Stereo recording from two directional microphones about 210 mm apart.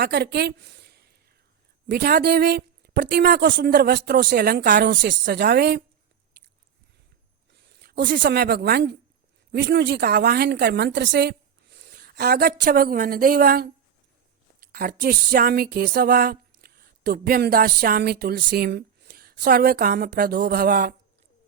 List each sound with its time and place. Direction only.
0.0 s a woman's voice: 50° right (ahead or behind)
7.7 s a woman's voice: 50° right (ahead or behind)